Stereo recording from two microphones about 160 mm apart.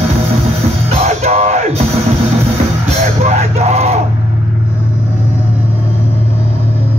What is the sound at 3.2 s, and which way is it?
Music, 45° right (ahead or behind).